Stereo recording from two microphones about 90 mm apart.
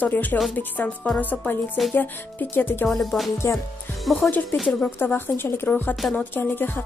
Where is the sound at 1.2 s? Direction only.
20° left (ahead or behind).